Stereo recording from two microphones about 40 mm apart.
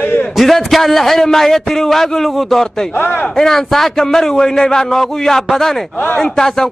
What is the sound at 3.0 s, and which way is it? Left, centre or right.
Speech, left.